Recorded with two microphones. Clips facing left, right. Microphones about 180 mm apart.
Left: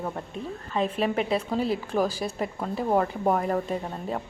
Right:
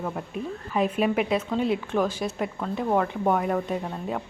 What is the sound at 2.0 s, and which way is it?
Speech, 35° left (ahead or behind).